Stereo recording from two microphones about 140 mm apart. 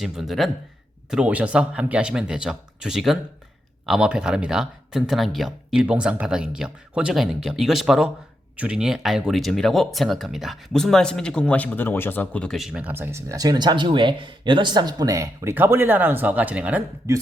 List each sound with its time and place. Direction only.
0.0 s speech: 5° right (ahead or behind)
12.8 s speech: 15° right (ahead or behind)